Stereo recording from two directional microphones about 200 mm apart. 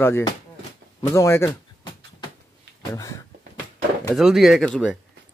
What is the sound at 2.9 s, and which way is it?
Speech, 15° left (ahead or behind).